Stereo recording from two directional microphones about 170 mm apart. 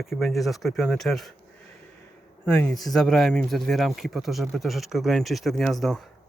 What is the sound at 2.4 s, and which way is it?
Speech, 5° left (ahead or behind).